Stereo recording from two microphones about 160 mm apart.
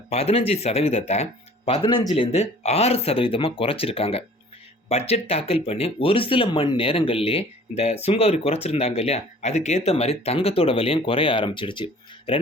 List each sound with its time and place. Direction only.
0.1 s speech: 40° left (ahead or behind)